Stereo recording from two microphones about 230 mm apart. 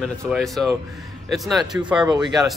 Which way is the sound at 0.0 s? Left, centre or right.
Centre.